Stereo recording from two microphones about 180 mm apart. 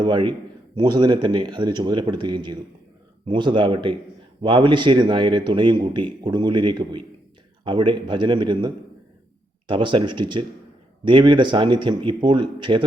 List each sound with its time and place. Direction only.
0.0 s speech: 25° right (ahead or behind)